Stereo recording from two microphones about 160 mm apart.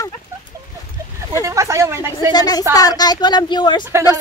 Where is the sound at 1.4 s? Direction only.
20° right (ahead or behind).